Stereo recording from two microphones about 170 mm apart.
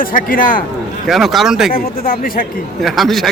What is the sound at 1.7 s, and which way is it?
Speech, 55° left (ahead or behind).